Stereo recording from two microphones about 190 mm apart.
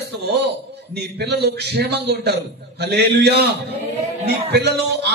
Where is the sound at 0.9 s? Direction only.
60° right (ahead or behind).